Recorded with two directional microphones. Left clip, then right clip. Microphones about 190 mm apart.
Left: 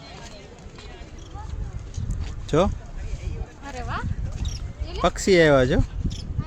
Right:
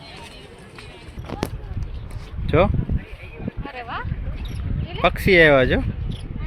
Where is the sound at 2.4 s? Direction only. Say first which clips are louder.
Right 3 dB; 20° left (ahead or behind).